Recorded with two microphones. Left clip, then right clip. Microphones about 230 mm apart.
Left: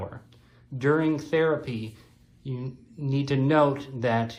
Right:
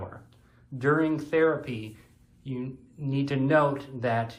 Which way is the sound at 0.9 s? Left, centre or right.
Left.